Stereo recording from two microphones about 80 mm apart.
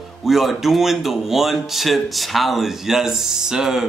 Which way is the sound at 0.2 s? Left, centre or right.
Centre.